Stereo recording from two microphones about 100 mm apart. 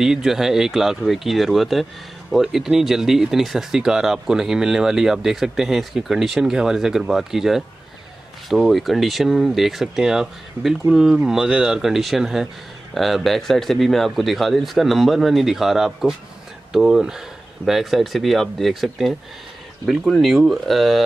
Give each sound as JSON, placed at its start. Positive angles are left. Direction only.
{"t": 0.0, "sound": "speech", "side_deg": -5}